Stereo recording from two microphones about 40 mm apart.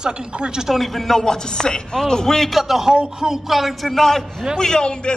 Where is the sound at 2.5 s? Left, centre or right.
Centre.